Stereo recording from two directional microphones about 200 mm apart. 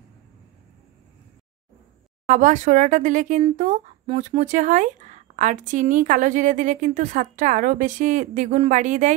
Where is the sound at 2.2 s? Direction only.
40° right (ahead or behind).